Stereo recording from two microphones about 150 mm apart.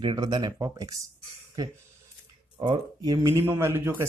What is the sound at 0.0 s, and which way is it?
Speech, 30° right (ahead or behind).